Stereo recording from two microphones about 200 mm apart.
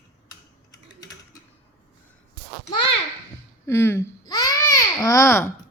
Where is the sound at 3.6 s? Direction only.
10° left (ahead or behind).